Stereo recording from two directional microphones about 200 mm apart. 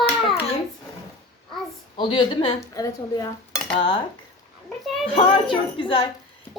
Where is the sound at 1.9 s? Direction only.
25° left (ahead or behind).